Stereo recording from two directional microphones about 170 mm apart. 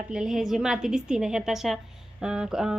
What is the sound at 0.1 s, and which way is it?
A woman's voice, 5° right (ahead or behind).